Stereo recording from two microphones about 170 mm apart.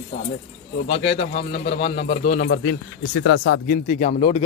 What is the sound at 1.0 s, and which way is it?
Speech, 35° left (ahead or behind).